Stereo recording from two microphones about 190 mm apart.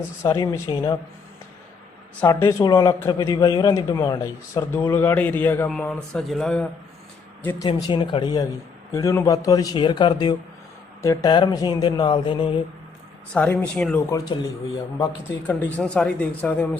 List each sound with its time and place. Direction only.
0.2 s speech: 15° left (ahead or behind)
2.2 s speech: 15° left (ahead or behind)
7.7 s a man's voice: 25° left (ahead or behind)
13.3 s speech: 5° left (ahead or behind)